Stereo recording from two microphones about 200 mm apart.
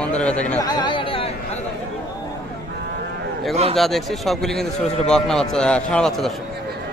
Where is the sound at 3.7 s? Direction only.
Centre (ahead or behind).